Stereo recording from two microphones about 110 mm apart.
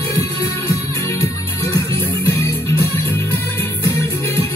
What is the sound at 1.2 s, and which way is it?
Music, 25° left (ahead or behind).